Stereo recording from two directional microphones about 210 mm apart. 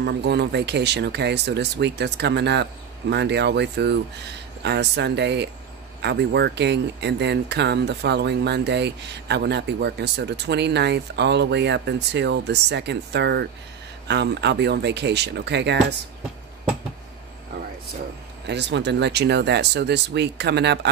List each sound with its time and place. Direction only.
0.0 s speech: 55° right (ahead or behind)
18.5 s speech: 55° right (ahead or behind)